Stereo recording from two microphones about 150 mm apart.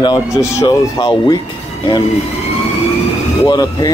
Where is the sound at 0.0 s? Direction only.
25° left (ahead or behind).